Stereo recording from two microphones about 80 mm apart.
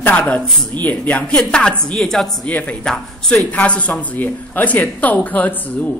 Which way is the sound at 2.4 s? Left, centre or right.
Centre.